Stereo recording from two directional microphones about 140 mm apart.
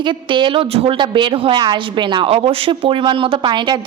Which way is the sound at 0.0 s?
35° right (ahead or behind).